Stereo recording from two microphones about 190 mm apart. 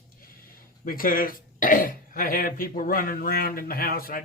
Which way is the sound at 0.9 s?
50° left (ahead or behind).